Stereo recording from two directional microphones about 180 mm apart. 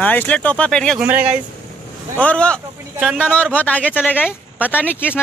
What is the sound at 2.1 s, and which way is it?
Speech, 5° left (ahead or behind).